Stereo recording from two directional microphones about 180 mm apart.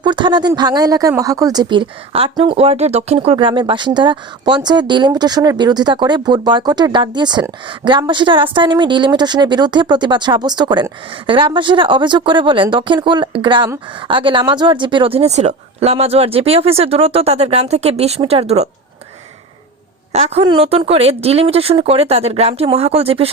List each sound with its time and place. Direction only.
0.0 s speech: 25° right (ahead or behind)
20.1 s speech: 35° right (ahead or behind)